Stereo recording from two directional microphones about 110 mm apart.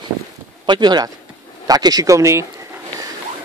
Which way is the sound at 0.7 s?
40° right (ahead or behind).